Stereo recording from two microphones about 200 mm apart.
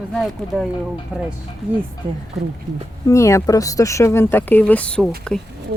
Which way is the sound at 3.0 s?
15° left (ahead or behind).